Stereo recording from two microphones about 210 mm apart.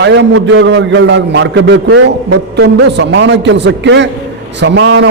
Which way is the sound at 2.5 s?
55° right (ahead or behind).